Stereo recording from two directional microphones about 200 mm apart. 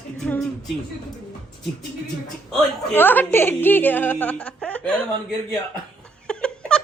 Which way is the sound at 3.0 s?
10° left (ahead or behind).